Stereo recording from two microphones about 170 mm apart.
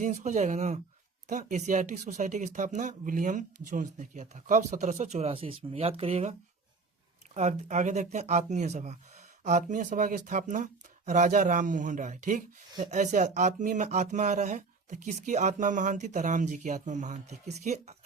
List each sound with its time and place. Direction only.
0.0 s speech: 45° right (ahead or behind)
7.3 s speech: 45° right (ahead or behind)